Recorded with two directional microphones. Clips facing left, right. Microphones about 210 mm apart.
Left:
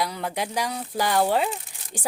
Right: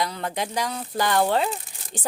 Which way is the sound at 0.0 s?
5° left (ahead or behind).